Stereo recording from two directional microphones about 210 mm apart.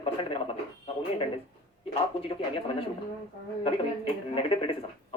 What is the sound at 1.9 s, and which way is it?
Speech, 25° left (ahead or behind).